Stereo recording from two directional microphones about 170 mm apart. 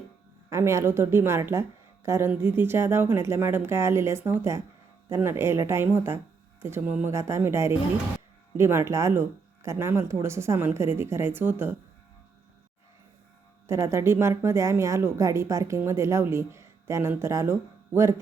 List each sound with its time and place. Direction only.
0.5 s a woman's voice: 15° right (ahead or behind)
13.7 s a woman's voice: 15° right (ahead or behind)